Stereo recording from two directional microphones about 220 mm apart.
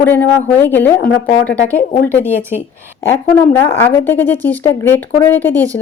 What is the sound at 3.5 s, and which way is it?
Speech, 10° left (ahead or behind).